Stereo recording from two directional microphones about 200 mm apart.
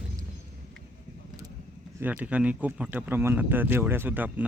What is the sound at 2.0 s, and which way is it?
Speech, 5° right (ahead or behind).